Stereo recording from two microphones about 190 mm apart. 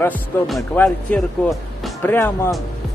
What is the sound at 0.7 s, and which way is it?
Speech, 10° left (ahead or behind).